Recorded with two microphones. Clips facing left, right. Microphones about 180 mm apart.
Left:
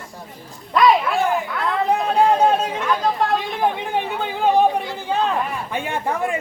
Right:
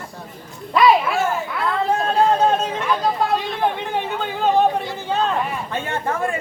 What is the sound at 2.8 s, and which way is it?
Speech, 5° right (ahead or behind).